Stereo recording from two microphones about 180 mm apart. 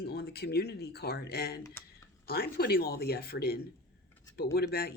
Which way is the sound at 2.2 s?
60° left (ahead or behind).